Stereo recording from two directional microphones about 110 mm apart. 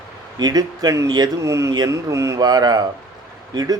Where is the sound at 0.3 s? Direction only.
40° right (ahead or behind).